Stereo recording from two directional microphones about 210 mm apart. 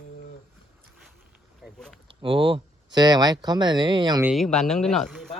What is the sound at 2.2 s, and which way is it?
Speech, 25° right (ahead or behind).